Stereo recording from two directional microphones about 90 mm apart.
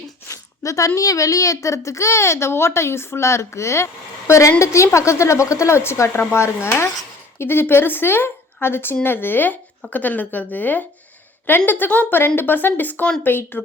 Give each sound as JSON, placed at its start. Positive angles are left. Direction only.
{"t": 0.3, "sound": "speech", "side_deg": 35}